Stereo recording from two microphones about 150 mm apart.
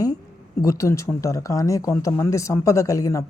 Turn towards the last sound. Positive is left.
turn(degrees=20)  # may be behind; listen again after turning